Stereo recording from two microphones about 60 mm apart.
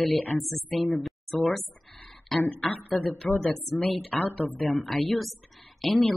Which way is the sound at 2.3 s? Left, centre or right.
Left.